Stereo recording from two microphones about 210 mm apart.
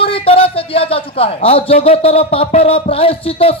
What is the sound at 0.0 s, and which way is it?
Speech, 25° left (ahead or behind).